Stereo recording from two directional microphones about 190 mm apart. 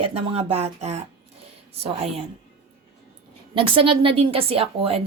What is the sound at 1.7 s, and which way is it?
Speech, 30° right (ahead or behind).